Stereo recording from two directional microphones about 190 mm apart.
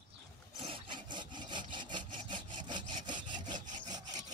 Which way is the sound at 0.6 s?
25° right (ahead or behind).